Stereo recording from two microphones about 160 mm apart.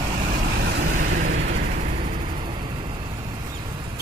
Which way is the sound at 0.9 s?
50° right (ahead or behind).